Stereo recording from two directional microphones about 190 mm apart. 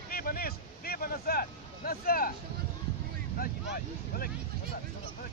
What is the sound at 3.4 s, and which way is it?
Speech, 50° left (ahead or behind).